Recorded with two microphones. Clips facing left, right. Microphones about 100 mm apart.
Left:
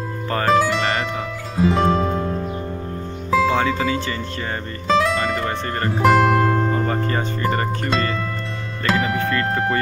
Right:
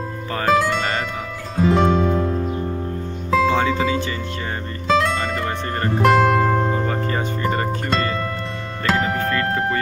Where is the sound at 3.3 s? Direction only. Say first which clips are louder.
Even; 5° left (ahead or behind).